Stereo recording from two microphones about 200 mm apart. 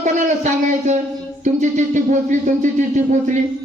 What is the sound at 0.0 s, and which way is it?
Speech, 40° right (ahead or behind).